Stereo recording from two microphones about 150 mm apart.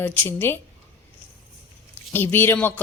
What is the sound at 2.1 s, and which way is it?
Speech, 15° left (ahead or behind).